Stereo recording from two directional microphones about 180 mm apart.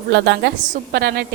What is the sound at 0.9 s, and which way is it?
Speech, 60° right (ahead or behind).